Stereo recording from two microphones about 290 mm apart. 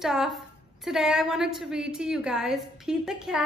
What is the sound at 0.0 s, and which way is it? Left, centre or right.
A woman's voice, centre.